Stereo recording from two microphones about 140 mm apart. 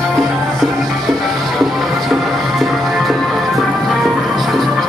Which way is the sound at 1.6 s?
Centre (ahead or behind).